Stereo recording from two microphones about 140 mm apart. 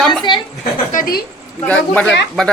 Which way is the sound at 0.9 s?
70° left (ahead or behind).